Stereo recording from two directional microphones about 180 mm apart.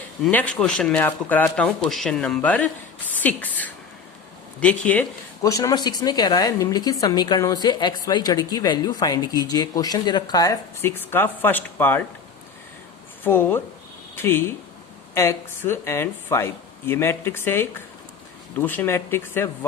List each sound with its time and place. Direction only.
0.3 s speech: 10° left (ahead or behind)
4.9 s speech: 10° left (ahead or behind)
5.5 s a woman's voice: 20° left (ahead or behind)
13.2 s speech: 10° left (ahead or behind)